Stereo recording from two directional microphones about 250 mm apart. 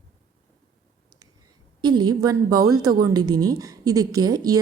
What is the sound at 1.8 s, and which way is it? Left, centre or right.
A woman's voice, centre.